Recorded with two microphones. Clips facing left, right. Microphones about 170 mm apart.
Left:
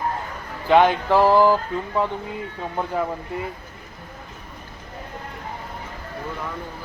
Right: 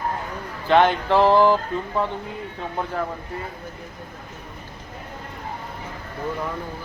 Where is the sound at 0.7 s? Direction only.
10° left (ahead or behind).